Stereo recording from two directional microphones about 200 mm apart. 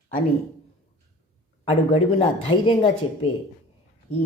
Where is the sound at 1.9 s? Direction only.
30° left (ahead or behind).